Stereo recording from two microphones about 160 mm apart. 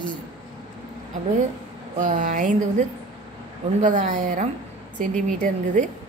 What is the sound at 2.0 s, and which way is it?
Speech, 50° right (ahead or behind).